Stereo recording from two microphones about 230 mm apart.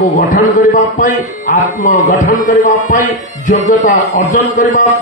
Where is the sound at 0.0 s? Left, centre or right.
Left.